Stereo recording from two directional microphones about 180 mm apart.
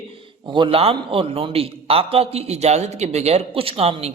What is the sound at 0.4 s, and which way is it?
A man's voice, 25° right (ahead or behind).